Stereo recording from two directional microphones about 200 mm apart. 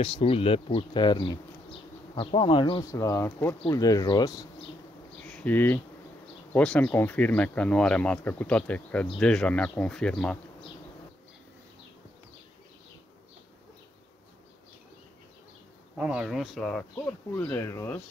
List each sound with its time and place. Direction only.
0.0 s speech: 30° left (ahead or behind)
2.8 s speech: 15° left (ahead or behind)
5.2 s bee: 5° left (ahead or behind)
6.5 s speech: 5° left (ahead or behind)
16.0 s speech: 5° right (ahead or behind); by 18.0 s 15° left (ahead or behind)